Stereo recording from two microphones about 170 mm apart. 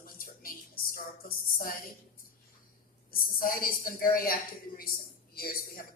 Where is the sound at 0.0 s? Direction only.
55° left (ahead or behind).